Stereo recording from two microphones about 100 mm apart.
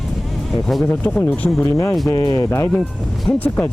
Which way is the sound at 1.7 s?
30° left (ahead or behind).